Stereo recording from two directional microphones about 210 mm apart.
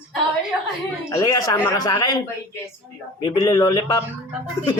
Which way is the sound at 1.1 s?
15° left (ahead or behind).